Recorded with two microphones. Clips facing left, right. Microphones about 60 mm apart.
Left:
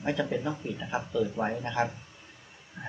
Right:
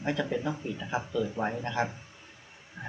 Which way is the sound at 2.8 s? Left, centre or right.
Right.